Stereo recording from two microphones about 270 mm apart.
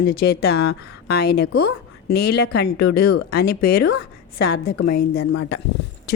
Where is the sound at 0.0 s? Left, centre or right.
Left.